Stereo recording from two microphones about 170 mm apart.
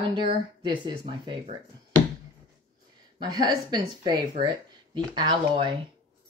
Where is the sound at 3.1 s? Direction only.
25° right (ahead or behind).